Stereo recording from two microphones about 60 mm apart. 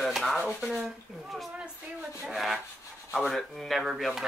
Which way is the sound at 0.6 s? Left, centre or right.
Centre.